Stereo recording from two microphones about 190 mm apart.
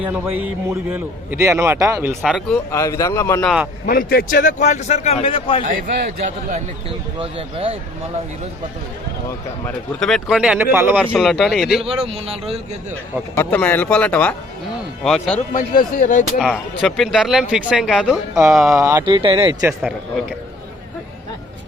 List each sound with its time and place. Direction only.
0.0 s a man's voice: 5° right (ahead or behind)
2.2 s speech: centre (ahead or behind)
2.7 s speech: 15° left (ahead or behind)
3.4 s speech: 5° right (ahead or behind)
3.8 s a man's voice: 50° left (ahead or behind); by 5.6 s 30° left (ahead or behind)
7.2 s speech: 30° right (ahead or behind)
10.0 s speech: centre (ahead or behind)
11.9 s a man's voice: 30° right (ahead or behind)
13.3 s speech: 10° left (ahead or behind)
15.4 s speech: 45° left (ahead or behind)
16.8 s speech: centre (ahead or behind)
18.8 s speech: 20° right (ahead or behind)